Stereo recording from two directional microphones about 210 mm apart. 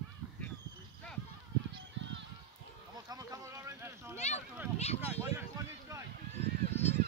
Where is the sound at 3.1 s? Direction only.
15° right (ahead or behind).